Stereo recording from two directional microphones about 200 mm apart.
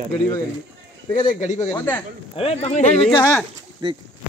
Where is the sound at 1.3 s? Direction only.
35° left (ahead or behind).